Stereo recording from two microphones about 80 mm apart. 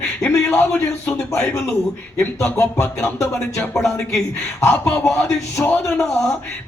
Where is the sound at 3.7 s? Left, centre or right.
Centre.